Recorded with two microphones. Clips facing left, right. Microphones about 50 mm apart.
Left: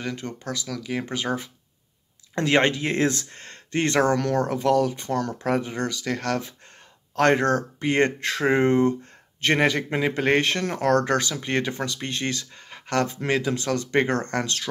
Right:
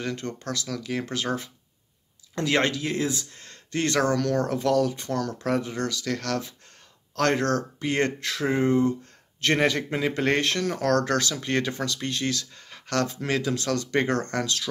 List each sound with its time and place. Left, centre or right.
0.0 s speech: centre
1.0 s speech: centre
2.3 s speech: left
9.0 s speech: left